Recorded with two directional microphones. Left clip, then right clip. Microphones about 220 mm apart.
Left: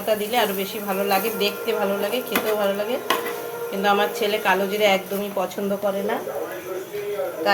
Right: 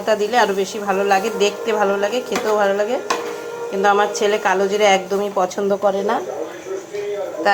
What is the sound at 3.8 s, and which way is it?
A woman's voice, 20° right (ahead or behind).